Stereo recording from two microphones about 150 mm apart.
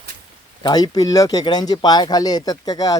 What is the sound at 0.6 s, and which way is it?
Speech, 25° left (ahead or behind).